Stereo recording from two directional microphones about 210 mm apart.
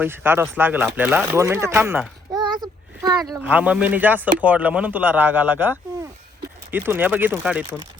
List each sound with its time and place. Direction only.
0.0 s speech: 10° right (ahead or behind)
2.3 s child singing: 20° right (ahead or behind)
3.2 s speech: 5° right (ahead or behind)